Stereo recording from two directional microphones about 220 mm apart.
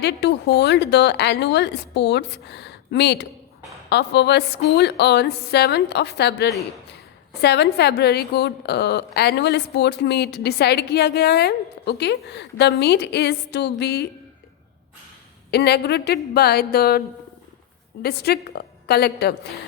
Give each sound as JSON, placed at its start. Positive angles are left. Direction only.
{"t": 0.0, "sound": "a woman's voice", "side_deg": 50}
{"t": 15.4, "sound": "a woman's voice", "side_deg": 50}
{"t": 18.0, "sound": "a woman's voice", "side_deg": 45}